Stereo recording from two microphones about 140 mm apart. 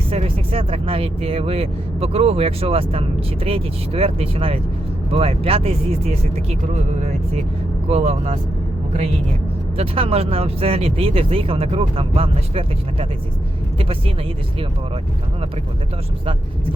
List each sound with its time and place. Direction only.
0.1 s speech: 40° right (ahead or behind)
7.9 s speech: 50° right (ahead or behind)
9.7 s speech: 45° right (ahead or behind)